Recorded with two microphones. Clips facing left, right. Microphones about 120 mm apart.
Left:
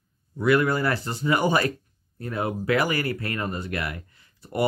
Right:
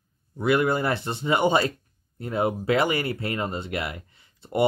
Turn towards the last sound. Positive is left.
turn(degrees=-25)  # may be behind; listen again after turning